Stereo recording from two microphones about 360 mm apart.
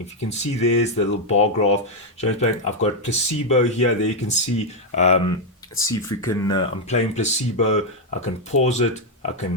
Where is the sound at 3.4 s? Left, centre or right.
Centre.